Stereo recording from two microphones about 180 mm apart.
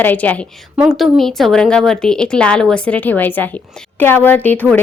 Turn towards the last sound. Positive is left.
turn(degrees=10)  # may be behind; listen again after turning